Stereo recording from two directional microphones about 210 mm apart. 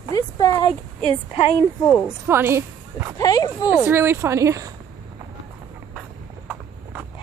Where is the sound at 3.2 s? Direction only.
20° left (ahead or behind).